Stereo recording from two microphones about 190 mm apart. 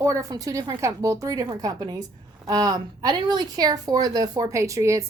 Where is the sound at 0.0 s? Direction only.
15° right (ahead or behind).